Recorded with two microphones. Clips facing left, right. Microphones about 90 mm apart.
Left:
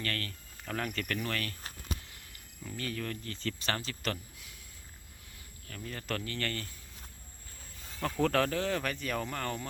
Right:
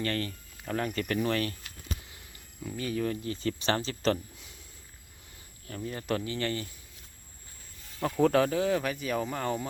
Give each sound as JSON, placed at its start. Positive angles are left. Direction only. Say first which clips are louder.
{"t": 0.0, "sound": "speech", "louder": "right 6 dB", "side_deg": -20}
{"t": 0.6, "sound": "speech", "louder": "right 4 dB", "side_deg": -5}
{"t": 1.0, "sound": "speech", "louder": "right 7 dB", "side_deg": -20}
{"t": 2.6, "sound": "speech", "louder": "right 6 dB", "side_deg": -15}
{"t": 5.6, "sound": "speech", "louder": "right 6 dB", "side_deg": -25}
{"t": 8.0, "sound": "speech", "louder": "right 5 dB", "side_deg": -10}